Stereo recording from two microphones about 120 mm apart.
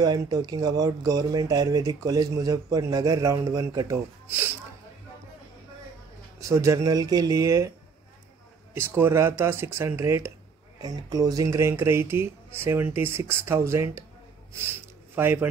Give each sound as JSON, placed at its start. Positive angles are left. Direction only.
{"t": 0.0, "sound": "speech", "side_deg": -30}
{"t": 6.4, "sound": "speech", "side_deg": -25}
{"t": 8.7, "sound": "speech", "side_deg": -20}
{"t": 15.1, "sound": "speech", "side_deg": -20}